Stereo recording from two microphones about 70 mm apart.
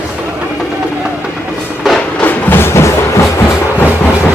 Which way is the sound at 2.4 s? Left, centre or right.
Left.